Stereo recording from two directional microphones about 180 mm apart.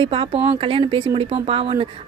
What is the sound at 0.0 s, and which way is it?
A woman's voice, 30° right (ahead or behind).